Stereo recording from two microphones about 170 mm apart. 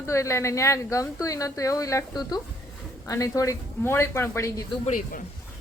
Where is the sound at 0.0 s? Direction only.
15° left (ahead or behind).